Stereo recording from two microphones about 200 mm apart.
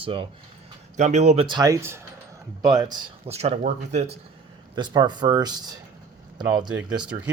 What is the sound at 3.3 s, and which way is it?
Speech, 30° right (ahead or behind).